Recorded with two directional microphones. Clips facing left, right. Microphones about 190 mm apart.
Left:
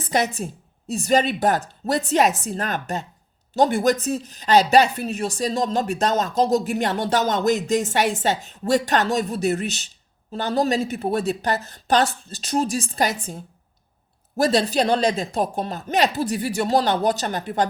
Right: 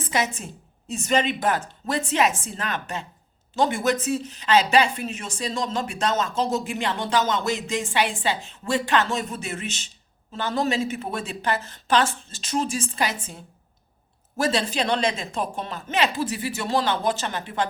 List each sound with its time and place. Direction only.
0.0 s speech: 40° left (ahead or behind)